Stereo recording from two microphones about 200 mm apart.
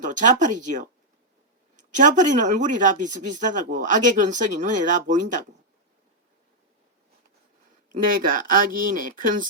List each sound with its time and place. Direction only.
0.0 s a woman's voice: 40° right (ahead or behind)
7.9 s speech: 45° right (ahead or behind)